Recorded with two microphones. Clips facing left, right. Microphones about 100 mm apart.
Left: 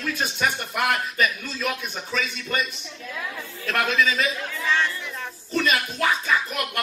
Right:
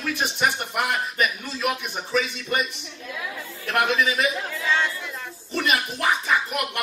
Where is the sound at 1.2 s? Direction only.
25° right (ahead or behind).